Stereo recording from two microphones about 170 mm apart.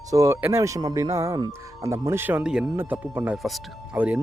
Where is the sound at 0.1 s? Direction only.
20° right (ahead or behind).